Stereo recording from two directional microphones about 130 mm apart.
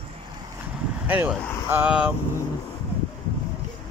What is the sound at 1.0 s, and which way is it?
Speech, 15° right (ahead or behind).